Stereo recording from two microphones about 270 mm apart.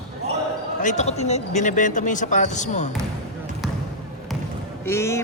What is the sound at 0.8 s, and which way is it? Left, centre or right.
Speech, left.